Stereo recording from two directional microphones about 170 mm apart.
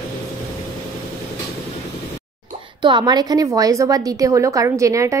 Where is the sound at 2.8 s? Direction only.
25° right (ahead or behind).